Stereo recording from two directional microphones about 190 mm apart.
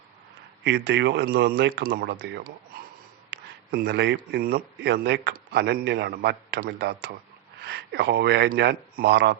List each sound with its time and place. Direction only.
0.6 s speech: 65° right (ahead or behind)